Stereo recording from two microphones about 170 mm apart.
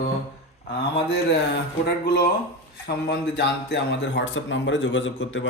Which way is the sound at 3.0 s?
90° left.